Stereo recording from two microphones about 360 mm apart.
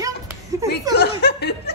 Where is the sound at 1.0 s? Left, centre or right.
Left.